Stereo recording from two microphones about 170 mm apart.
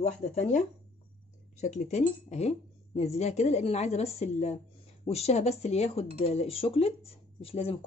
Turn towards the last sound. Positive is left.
turn(degrees=35)  # may be behind; listen again after turning